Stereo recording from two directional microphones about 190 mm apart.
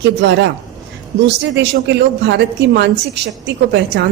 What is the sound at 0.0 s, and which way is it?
Speech, 65° right (ahead or behind).